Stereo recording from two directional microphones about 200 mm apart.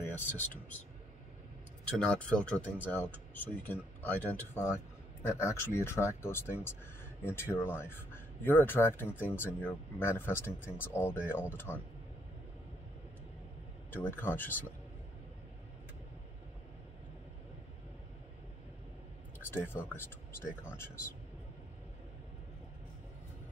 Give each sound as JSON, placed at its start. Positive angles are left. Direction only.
{"t": 1.9, "sound": "speech", "side_deg": 5}
{"t": 13.8, "sound": "speech", "side_deg": 10}
{"t": 19.5, "sound": "speech", "side_deg": 10}